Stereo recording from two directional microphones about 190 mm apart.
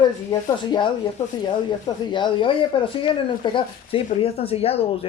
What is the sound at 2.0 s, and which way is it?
Speech, 25° left (ahead or behind).